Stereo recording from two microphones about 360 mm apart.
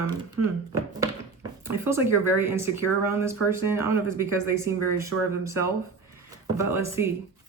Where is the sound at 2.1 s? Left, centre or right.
Left.